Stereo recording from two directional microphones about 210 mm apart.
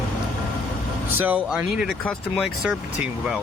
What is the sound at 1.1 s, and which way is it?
Speech, 10° right (ahead or behind).